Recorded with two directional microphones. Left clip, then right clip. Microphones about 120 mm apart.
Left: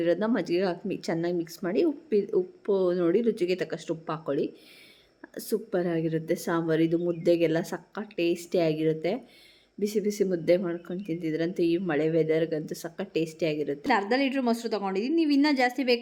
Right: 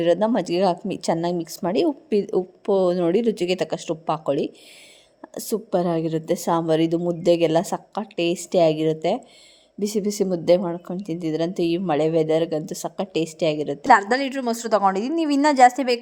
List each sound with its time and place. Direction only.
0.0 s a woman's voice: 35° right (ahead or behind)
13.8 s a woman's voice: 25° right (ahead or behind)